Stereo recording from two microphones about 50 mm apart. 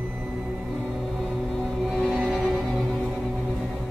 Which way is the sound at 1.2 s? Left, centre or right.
Centre.